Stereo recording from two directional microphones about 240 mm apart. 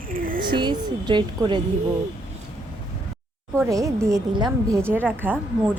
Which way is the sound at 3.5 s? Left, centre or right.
Centre.